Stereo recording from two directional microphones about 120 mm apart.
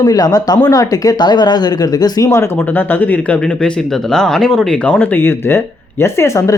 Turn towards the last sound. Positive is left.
turn(degrees=25)  # may be behind; listen again after turning